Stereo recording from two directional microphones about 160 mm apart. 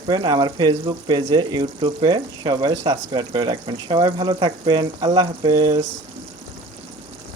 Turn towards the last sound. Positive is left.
turn(degrees=-25)  # may be behind; listen again after turning